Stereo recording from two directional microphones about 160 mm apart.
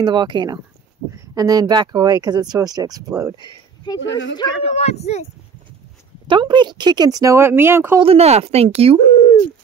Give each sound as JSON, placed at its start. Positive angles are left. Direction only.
{"t": 0.0, "sound": "speech", "side_deg": -30}
{"t": 3.8, "sound": "speech", "side_deg": 25}
{"t": 4.6, "sound": "speech", "side_deg": 40}
{"t": 6.2, "sound": "speech", "side_deg": -30}
{"t": 8.0, "sound": "speech", "side_deg": -40}
{"t": 9.0, "sound": "a sound", "side_deg": 35}